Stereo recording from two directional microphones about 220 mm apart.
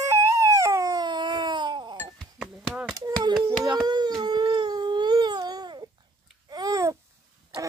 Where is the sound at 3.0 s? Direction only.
15° right (ahead or behind).